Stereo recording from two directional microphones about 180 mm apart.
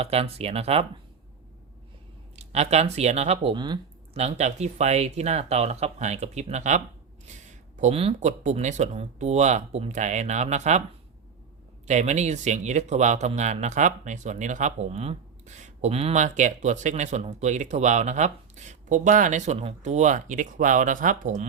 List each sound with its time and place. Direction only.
0.0 s speech: 35° right (ahead or behind)
2.3 s speech: 35° right (ahead or behind)
4.2 s speech: 40° right (ahead or behind)
11.9 s speech: 40° right (ahead or behind)